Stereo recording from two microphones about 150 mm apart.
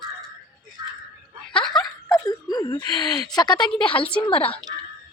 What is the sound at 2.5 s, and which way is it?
A woman's voice, 30° left (ahead or behind).